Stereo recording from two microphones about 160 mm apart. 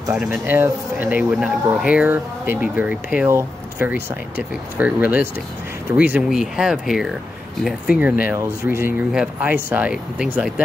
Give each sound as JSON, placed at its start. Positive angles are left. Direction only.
{"t": 0.1, "sound": "speech", "side_deg": -5}